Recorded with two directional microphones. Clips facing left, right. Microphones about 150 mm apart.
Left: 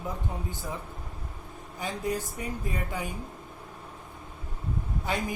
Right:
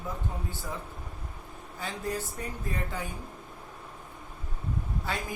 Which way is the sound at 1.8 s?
15° left (ahead or behind).